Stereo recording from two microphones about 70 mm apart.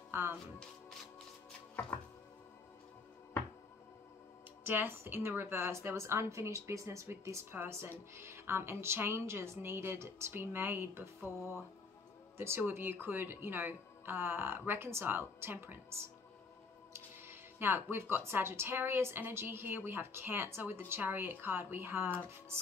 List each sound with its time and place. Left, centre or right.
0.1 s speech: right
4.6 s speech: right
16.9 s speech: right